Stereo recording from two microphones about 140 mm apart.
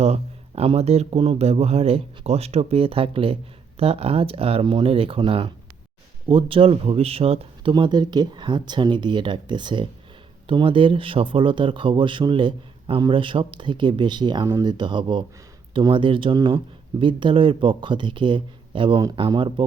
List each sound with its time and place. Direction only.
0.0 s speech: 50° right (ahead or behind)